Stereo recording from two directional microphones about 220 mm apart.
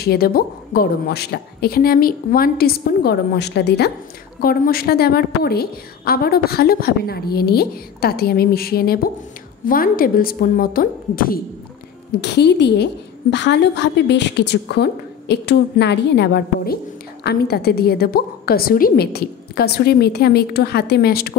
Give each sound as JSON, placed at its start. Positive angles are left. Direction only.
{"t": 0.0, "sound": "a woman's voice", "side_deg": 45}